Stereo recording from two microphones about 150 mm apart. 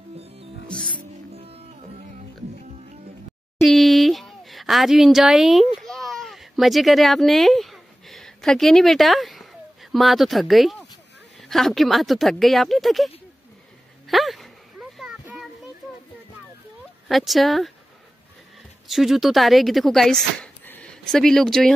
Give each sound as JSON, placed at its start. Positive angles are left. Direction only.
{"t": 0.9, "sound": "music", "side_deg": -40}
{"t": 3.6, "sound": "a sound", "side_deg": 0}
{"t": 11.4, "sound": "speech", "side_deg": 0}
{"t": 14.0, "sound": "a sound", "side_deg": 0}
{"t": 17.1, "sound": "speech", "side_deg": 0}
{"t": 18.9, "sound": "speech", "side_deg": 0}